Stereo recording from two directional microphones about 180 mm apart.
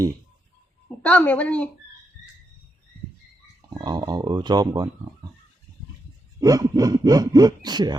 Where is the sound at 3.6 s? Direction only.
25° right (ahead or behind).